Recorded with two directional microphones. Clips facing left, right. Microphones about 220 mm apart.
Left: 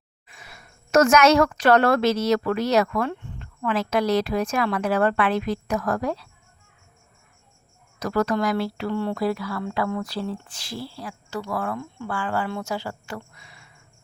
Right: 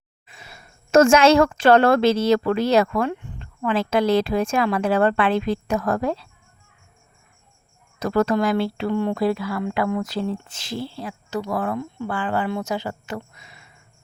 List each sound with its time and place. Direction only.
0.3 s a woman's voice: 25° right (ahead or behind)
3.1 s cricket: 15° right (ahead or behind)
3.4 s speech: 25° right (ahead or behind)
7.9 s speech: 25° right (ahead or behind)